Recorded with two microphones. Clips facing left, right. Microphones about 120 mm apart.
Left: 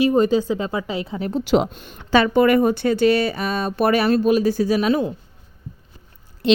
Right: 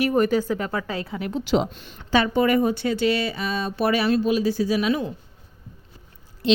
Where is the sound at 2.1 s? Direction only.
70° left (ahead or behind); by 5.1 s 35° left (ahead or behind).